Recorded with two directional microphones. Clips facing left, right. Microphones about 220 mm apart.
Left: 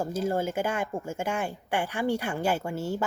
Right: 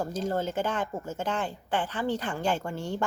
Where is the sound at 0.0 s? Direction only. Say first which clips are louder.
Left 2 dB; 10° left (ahead or behind).